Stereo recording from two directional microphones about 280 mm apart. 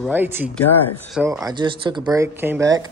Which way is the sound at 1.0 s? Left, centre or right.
Centre.